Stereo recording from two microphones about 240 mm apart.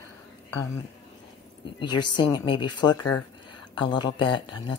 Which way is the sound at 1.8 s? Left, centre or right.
Centre.